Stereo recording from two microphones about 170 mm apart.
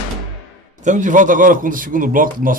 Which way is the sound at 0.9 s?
45° right (ahead or behind).